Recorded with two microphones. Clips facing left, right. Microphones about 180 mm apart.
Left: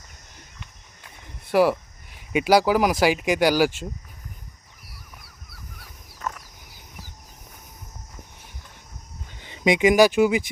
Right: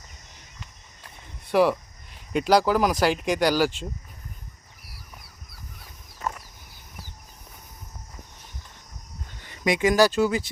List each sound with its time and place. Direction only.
1.0 s a sound: 5° left (ahead or behind)
2.3 s speech: 10° left (ahead or behind)
6.1 s chicken: 10° right (ahead or behind)
9.4 s speech: 20° left (ahead or behind)